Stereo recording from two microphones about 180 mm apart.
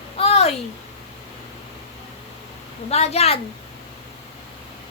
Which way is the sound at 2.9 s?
35° left (ahead or behind).